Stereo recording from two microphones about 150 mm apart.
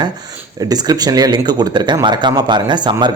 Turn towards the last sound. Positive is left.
turn(degrees=-30)  # may be behind; listen again after turning